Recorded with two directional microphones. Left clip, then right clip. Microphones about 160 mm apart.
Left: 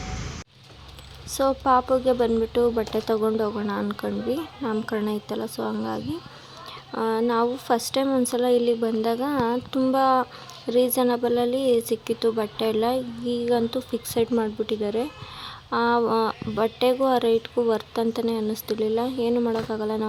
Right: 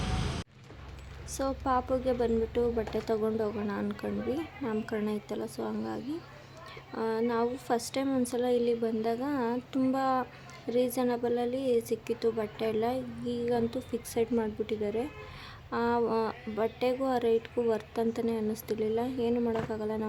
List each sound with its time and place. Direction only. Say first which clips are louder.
1.3 s a woman's voice: left 10 dB; 15° left (ahead or behind)